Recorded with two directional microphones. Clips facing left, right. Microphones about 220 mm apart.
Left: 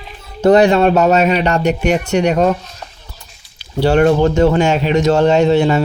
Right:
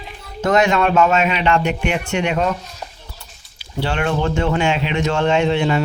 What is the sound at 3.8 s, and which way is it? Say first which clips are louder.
Speech: left 9 dB; 40° left (ahead or behind).